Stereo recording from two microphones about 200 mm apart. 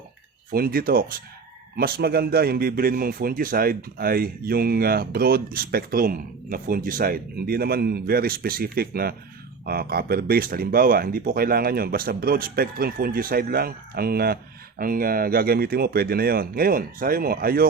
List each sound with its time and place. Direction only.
0.5 s speech: 50° right (ahead or behind)